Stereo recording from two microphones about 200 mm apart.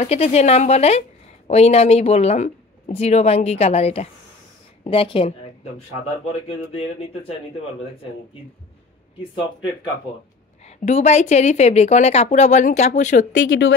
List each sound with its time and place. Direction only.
0.0 s speech: 30° left (ahead or behind)
10.9 s speech: 35° left (ahead or behind)
13.4 s speech: 70° left (ahead or behind)